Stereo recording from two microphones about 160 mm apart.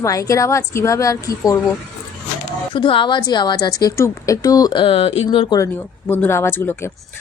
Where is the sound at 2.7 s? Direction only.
30° left (ahead or behind).